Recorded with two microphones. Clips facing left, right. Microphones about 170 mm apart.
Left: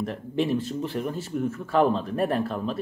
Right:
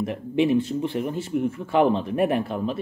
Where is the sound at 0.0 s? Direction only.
15° right (ahead or behind).